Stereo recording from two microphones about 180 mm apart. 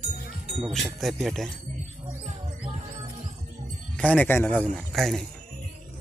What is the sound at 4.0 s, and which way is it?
Speech, 10° left (ahead or behind).